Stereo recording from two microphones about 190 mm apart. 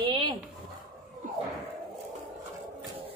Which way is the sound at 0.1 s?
25° right (ahead or behind).